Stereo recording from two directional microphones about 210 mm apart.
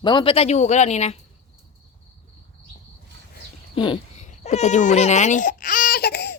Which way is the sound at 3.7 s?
25° left (ahead or behind).